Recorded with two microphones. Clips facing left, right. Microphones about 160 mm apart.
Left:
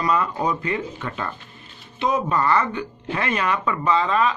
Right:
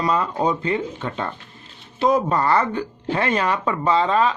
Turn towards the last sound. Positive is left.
turn(degrees=-30)  # may be behind; listen again after turning